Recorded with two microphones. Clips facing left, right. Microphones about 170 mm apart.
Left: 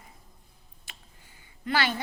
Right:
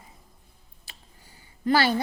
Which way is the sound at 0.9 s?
35° right (ahead or behind).